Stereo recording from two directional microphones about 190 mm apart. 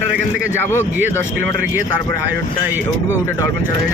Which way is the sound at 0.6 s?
10° left (ahead or behind).